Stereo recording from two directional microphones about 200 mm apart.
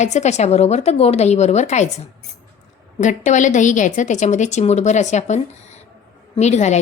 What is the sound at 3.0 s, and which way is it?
A woman's voice, 40° left (ahead or behind).